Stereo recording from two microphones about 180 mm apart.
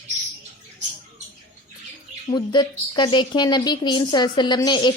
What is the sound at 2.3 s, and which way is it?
A woman's voice, 25° left (ahead or behind).